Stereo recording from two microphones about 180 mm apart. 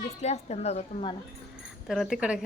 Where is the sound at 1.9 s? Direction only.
Centre (ahead or behind).